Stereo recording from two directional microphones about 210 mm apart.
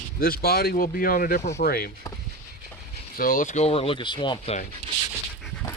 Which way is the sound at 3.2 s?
40° left (ahead or behind).